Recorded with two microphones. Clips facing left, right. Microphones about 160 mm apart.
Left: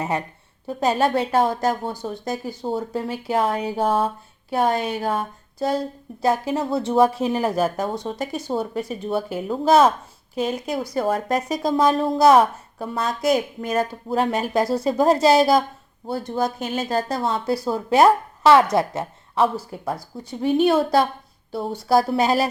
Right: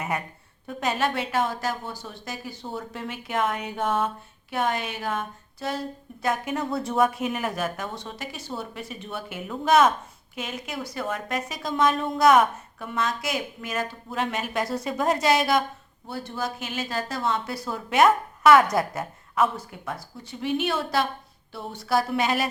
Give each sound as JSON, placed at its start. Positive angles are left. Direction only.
{"t": 0.0, "sound": "a woman's voice", "side_deg": 30}